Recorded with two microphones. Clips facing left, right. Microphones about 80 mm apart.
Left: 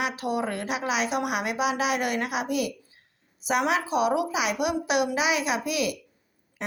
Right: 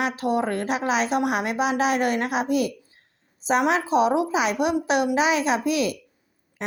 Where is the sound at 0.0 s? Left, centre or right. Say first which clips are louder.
Right 4 dB; right.